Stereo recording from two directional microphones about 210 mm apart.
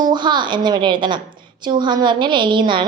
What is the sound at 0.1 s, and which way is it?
A woman's voice, 20° right (ahead or behind).